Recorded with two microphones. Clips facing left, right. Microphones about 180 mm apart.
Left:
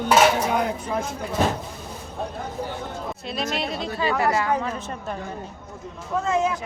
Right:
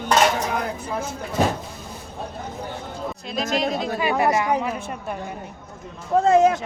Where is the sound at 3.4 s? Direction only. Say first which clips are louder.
Right 6 dB; 45° right (ahead or behind).